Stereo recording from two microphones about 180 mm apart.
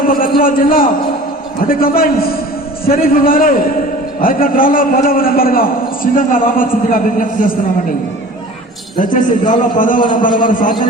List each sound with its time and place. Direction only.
0.0 s a man's voice: 50° left (ahead or behind)
9.0 s a man's voice: 45° left (ahead or behind)